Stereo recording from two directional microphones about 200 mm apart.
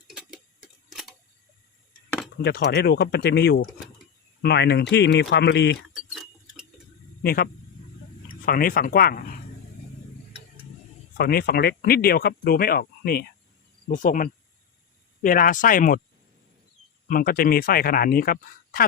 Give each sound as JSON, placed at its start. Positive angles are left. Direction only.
{"t": 0.1, "sound": "tick-tock", "side_deg": -5}
{"t": 2.4, "sound": "speech", "side_deg": 55}
{"t": 5.9, "sound": "clock", "side_deg": 0}
{"t": 7.2, "sound": "speech", "side_deg": 50}
{"t": 11.2, "sound": "speech", "side_deg": 50}
{"t": 17.1, "sound": "speech", "side_deg": 45}